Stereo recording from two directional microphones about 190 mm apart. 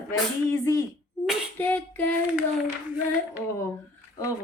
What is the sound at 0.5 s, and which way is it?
Speech, 15° left (ahead or behind).